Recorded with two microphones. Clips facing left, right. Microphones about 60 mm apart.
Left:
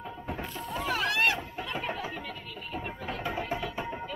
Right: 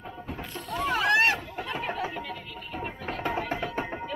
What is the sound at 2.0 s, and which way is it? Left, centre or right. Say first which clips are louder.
Music: right 4 dB; centre.